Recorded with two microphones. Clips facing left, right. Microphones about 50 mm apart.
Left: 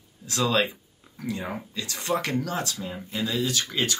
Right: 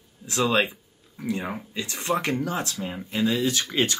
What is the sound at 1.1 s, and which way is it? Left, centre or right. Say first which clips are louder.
Speech: right 2 dB; centre.